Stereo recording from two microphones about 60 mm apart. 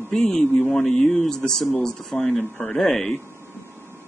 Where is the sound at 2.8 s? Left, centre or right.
Centre.